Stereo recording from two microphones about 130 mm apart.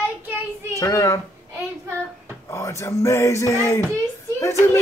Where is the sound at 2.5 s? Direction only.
20° left (ahead or behind).